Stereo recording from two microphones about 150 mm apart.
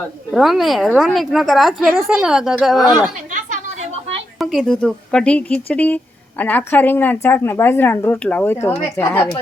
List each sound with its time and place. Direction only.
0.0 s a woman's voice: 5° left (ahead or behind)
2.8 s a woman's voice: 25° left (ahead or behind)
4.4 s speech: centre (ahead or behind)
8.7 s a woman's voice: 5° left (ahead or behind)